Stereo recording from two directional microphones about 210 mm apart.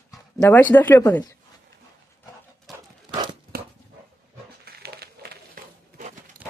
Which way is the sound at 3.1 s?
20° right (ahead or behind).